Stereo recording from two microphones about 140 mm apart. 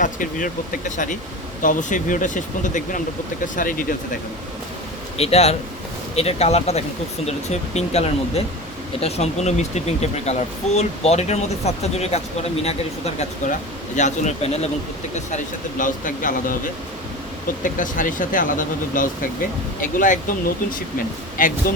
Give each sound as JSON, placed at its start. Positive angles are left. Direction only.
{"t": 0.0, "sound": "speech", "side_deg": 70}
{"t": 5.1, "sound": "speech", "side_deg": 50}
{"t": 15.8, "sound": "speech", "side_deg": 70}
{"t": 17.6, "sound": "speech", "side_deg": 70}
{"t": 21.4, "sound": "speech", "side_deg": 70}